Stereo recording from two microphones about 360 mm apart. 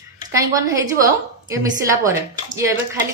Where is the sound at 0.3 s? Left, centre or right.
Centre.